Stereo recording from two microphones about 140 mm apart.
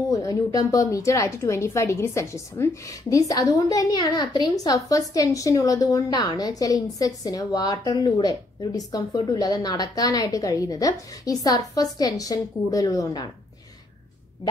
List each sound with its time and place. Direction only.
0.1 s a woman's voice: 25° left (ahead or behind)